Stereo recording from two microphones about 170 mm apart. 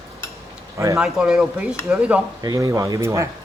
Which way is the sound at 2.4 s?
20° right (ahead or behind).